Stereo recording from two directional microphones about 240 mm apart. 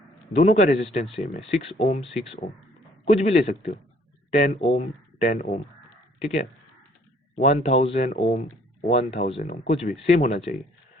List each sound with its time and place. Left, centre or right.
0.3 s speech: left
7.3 s speech: left